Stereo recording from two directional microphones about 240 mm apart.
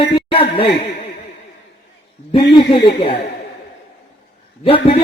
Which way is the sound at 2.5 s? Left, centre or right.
Left.